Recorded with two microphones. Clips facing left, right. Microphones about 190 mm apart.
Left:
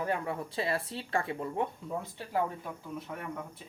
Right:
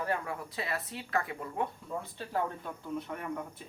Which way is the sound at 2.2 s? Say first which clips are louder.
Left 1 dB; 10° left (ahead or behind).